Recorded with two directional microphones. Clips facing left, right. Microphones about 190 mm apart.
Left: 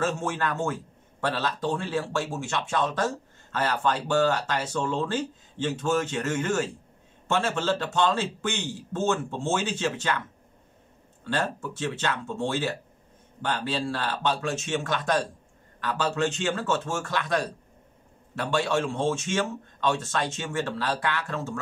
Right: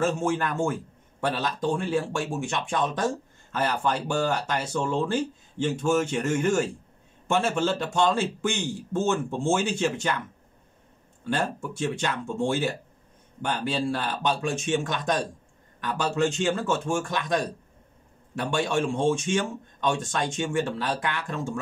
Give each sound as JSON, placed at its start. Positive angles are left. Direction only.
{"t": 0.0, "sound": "a man's voice", "side_deg": -15}
{"t": 11.2, "sound": "a man's voice", "side_deg": -15}